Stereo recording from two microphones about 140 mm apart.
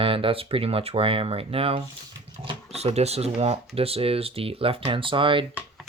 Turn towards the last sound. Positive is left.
turn(degrees=-35)  # may be behind; listen again after turning